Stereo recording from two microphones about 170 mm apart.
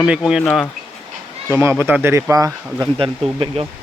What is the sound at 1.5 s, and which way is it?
Speech, 15° right (ahead or behind).